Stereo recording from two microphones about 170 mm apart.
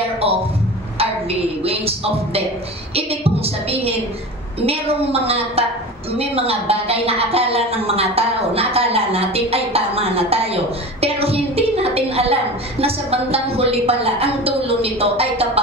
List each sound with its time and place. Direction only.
1.6 s a woman's voice: 35° right (ahead or behind)